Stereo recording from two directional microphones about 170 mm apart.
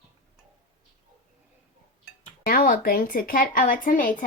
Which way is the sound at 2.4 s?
55° left (ahead or behind).